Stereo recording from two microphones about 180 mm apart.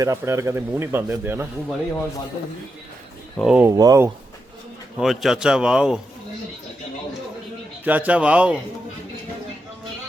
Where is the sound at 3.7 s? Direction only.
20° right (ahead or behind).